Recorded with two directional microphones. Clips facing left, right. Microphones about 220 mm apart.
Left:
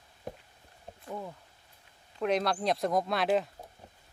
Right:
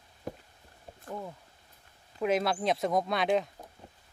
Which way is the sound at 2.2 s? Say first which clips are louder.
Right 1 dB; 5° right (ahead or behind).